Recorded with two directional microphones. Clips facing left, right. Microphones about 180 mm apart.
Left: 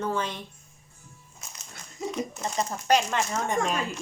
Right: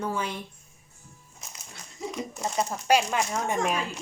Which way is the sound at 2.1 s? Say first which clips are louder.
Left 1 dB; 5° right (ahead or behind).